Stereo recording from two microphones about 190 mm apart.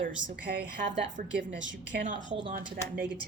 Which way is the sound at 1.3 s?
75° right (ahead or behind).